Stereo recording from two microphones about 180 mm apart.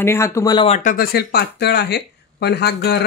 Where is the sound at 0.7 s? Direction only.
45° left (ahead or behind).